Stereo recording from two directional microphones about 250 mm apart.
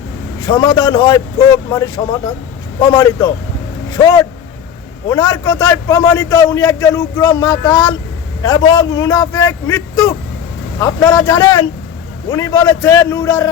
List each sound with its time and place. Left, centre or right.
0.4 s a man's voice: centre
2.9 s a man's voice: centre